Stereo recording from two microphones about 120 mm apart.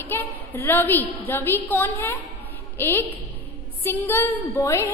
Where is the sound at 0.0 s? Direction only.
15° left (ahead or behind).